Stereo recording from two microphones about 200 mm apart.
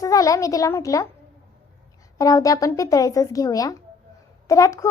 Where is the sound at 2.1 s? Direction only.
15° left (ahead or behind).